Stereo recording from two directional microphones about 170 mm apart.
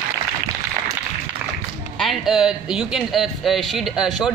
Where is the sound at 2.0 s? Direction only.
Centre (ahead or behind).